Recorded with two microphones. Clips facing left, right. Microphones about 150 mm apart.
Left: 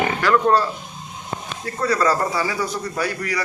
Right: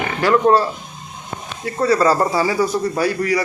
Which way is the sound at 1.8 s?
30° right (ahead or behind).